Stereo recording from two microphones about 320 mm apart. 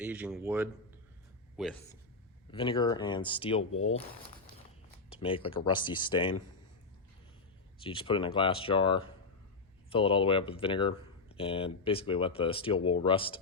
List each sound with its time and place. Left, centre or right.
0.0 s speech: centre
2.5 s speech: centre
5.2 s speech: centre
7.8 s speech: centre